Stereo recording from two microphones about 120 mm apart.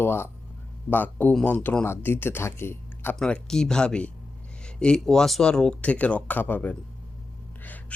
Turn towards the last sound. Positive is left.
turn(degrees=15)  # may be behind; listen again after turning